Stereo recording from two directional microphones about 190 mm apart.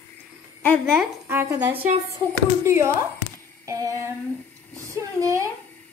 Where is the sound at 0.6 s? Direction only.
10° left (ahead or behind).